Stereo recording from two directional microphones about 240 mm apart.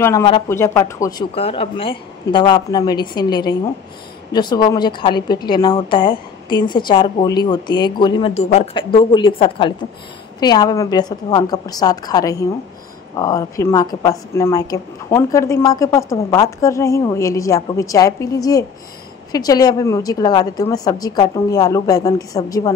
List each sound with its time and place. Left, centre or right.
0.0 s a woman's voice: centre
1.3 s a woman's voice: left